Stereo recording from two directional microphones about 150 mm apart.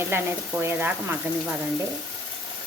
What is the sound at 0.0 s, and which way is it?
A woman's voice, 15° right (ahead or behind).